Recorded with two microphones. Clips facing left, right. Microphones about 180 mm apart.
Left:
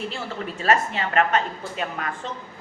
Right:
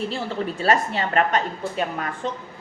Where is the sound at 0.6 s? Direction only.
35° right (ahead or behind).